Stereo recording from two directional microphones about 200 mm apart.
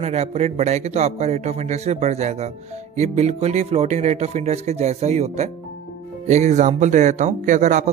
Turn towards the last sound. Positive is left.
turn(degrees=-35)  # may be behind; listen again after turning